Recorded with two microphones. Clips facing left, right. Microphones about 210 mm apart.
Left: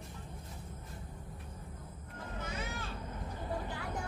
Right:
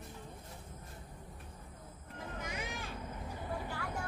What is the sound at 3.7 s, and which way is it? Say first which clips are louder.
Vehicle: left 1 dB; 15° left (ahead or behind).